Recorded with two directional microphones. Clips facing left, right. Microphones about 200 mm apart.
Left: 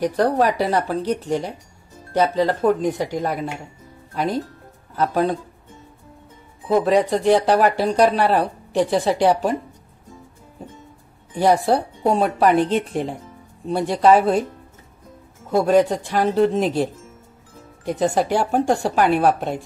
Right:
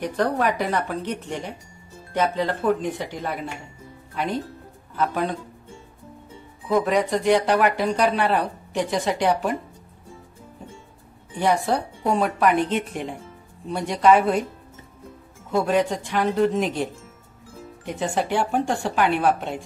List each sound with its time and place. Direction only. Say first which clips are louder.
0.0 s speech: left 4 dB; 35° left (ahead or behind)
6.7 s speech: left 4 dB; 30° left (ahead or behind)
11.3 s speech: left 5 dB; 35° left (ahead or behind)
15.5 s speech: left 5 dB; 40° left (ahead or behind)